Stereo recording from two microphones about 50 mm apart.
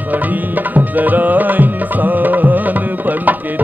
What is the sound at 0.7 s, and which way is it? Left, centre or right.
Music, right.